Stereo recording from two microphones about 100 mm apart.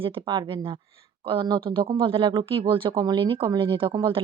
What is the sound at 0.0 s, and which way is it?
Speech, 60° right (ahead or behind).